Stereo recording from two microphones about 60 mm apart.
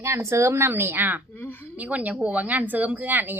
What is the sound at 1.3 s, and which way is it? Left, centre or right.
Speech, left.